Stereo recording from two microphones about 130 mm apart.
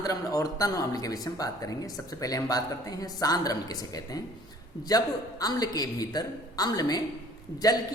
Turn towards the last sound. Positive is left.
turn(degrees=30)  # may be behind; listen again after turning